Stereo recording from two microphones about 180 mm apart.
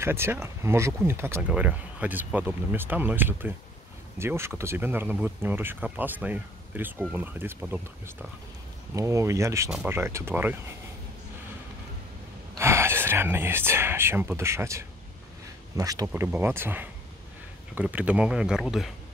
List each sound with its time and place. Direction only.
0.0 s speech: 15° right (ahead or behind)
12.5 s speech: 15° right (ahead or behind)